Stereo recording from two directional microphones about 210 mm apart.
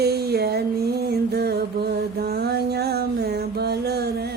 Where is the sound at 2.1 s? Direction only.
50° right (ahead or behind).